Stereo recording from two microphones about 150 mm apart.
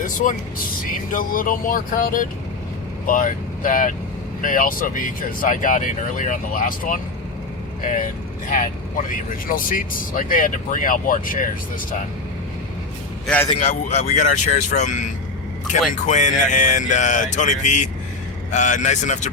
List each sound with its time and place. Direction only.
0.0 s speech: 65° left (ahead or behind)
13.2 s a man's voice: 10° left (ahead or behind)
13.5 s speech: 40° left (ahead or behind)
14.2 s speech: 55° left (ahead or behind)